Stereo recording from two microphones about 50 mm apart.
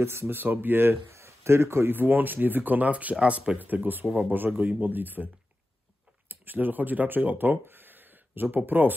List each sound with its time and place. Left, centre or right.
0.0 s speech: right
1.1 s a sound: right
1.9 s speech: right
3.5 s speech: right
7.6 s a sound: right
8.6 s speech: right